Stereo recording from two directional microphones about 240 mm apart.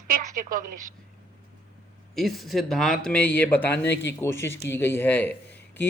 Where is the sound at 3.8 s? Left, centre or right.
Left.